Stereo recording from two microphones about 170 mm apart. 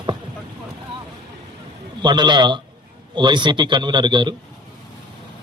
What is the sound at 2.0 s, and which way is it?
A man's voice, 25° right (ahead or behind).